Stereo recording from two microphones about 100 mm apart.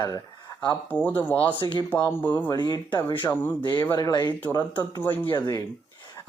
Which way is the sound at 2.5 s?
45° left (ahead or behind).